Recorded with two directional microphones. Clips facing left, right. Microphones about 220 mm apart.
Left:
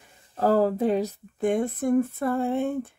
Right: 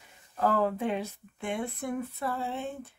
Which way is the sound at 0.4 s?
35° left (ahead or behind).